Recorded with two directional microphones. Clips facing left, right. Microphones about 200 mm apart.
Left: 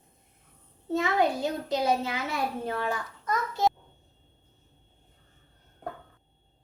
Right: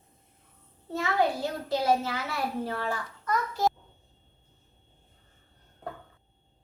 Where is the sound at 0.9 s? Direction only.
20° left (ahead or behind).